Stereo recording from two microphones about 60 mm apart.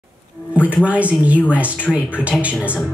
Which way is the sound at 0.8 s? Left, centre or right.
Right.